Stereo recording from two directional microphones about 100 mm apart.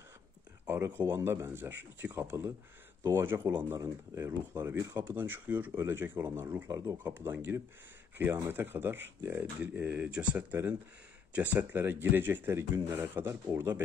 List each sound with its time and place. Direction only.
0.7 s speech: 20° right (ahead or behind)